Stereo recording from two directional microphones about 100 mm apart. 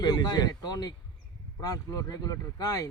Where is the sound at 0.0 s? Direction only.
45° left (ahead or behind).